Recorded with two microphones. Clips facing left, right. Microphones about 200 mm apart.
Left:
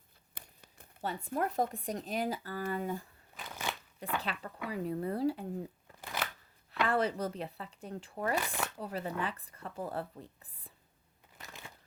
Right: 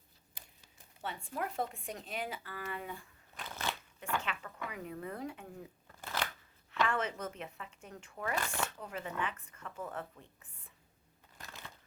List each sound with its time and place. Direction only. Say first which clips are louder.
0.3 s a sound: left 5 dB; 60° left (ahead or behind)
1.0 s speech: left 5 dB; 40° left (ahead or behind)
3.3 s crunch: even; 10° left (ahead or behind)
4.2 s speech: left 3 dB; 35° left (ahead or behind)
6.8 s speech: left 5 dB; 35° left (ahead or behind)
8.4 s speech: left 1 dB; 15° left (ahead or behind)
8.8 s speech: left 3 dB; 35° left (ahead or behind)
11.3 s shuffling cards: left 1 dB; 10° left (ahead or behind)